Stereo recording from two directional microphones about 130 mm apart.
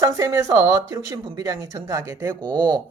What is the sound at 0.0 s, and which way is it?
Speech, 25° right (ahead or behind).